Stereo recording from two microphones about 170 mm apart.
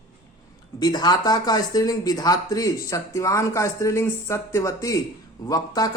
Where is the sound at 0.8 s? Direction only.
25° left (ahead or behind).